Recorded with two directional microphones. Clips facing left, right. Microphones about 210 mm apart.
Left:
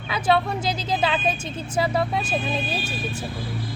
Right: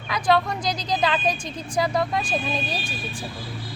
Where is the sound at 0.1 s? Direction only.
5° left (ahead or behind).